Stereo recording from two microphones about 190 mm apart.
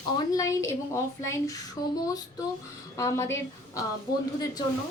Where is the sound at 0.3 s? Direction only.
15° left (ahead or behind).